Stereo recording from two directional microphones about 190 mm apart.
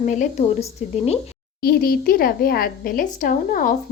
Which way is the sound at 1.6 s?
50° left (ahead or behind).